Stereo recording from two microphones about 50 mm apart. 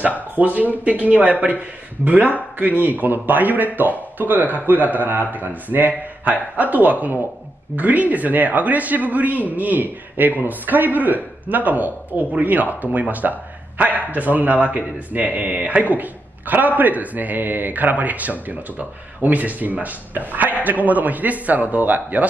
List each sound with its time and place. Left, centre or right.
0.4 s speech: right